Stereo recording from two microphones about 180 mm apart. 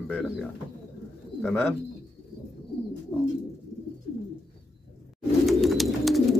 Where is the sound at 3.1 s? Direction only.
10° left (ahead or behind).